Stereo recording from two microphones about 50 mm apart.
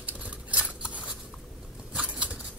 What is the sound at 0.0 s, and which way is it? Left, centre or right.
Scissors, right.